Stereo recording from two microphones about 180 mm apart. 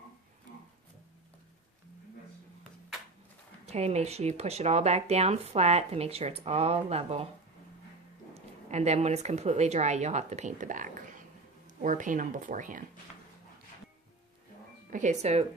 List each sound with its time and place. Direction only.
3.7 s speech: 35° right (ahead or behind)
8.3 s a woman's voice: 35° right (ahead or behind)
14.8 s speech: 45° right (ahead or behind)